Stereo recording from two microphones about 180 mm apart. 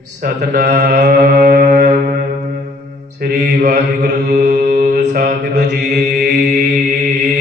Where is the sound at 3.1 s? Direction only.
55° right (ahead or behind).